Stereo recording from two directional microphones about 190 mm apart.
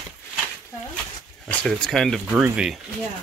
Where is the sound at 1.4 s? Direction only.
5° left (ahead or behind).